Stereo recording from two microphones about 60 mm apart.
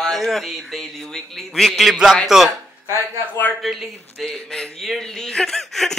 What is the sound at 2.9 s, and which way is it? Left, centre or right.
Speech, left.